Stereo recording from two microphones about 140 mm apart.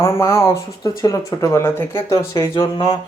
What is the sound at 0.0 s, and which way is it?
Speech, 20° left (ahead or behind).